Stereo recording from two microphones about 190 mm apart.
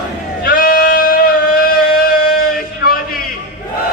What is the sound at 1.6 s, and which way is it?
Music, 50° left (ahead or behind).